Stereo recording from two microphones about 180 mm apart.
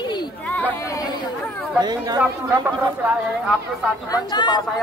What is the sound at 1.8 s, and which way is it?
Speech, 25° right (ahead or behind).